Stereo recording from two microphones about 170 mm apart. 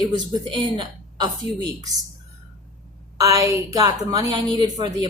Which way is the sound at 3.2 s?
20° right (ahead or behind).